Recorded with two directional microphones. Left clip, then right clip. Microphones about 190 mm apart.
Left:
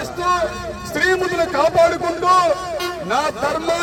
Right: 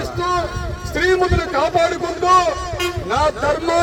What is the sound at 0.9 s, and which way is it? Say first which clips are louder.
A man's voice: right 1 dB; 55° left (ahead or behind).